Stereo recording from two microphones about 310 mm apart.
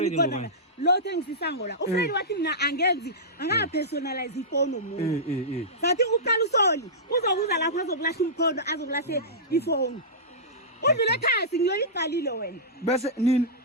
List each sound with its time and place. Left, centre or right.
0.0 s speech: left
4.9 s speech: centre
5.8 s speech: left